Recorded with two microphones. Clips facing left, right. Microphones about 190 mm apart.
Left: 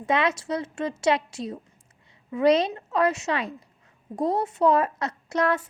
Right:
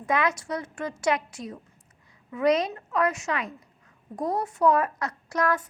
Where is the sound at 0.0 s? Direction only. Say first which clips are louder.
Left 2 dB; 25° left (ahead or behind).